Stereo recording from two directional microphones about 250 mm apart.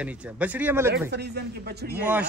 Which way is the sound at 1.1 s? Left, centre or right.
Right.